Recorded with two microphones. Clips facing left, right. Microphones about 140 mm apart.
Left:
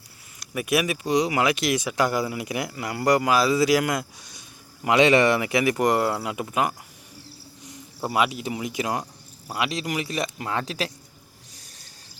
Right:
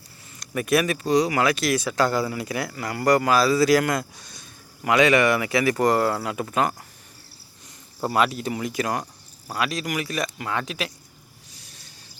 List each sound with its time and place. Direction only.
0.3 s speech: 10° left (ahead or behind)
4.9 s speech: 25° left (ahead or behind)